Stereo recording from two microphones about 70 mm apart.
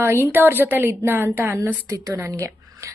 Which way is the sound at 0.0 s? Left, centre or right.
Right.